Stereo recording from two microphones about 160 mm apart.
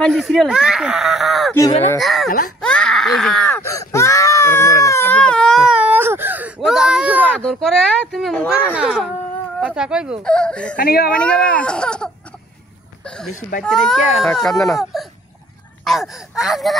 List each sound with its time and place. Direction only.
0.0 s speech: centre (ahead or behind)
2.6 s a sound: 5° left (ahead or behind)
3.6 s baby cry: 20° left (ahead or behind); by 5.8 s 5° left (ahead or behind)
5.8 s baby cry: 10° right (ahead or behind)
7.2 s a sound: 5° left (ahead or behind)
8.7 s speech: 5° right (ahead or behind)
10.2 s speech: 5° left (ahead or behind)
10.8 s speech: 70° left (ahead or behind)
11.1 s speech: 5° left (ahead or behind)
13.0 s a sound: 5° left (ahead or behind)
13.6 s speech: 5° left (ahead or behind)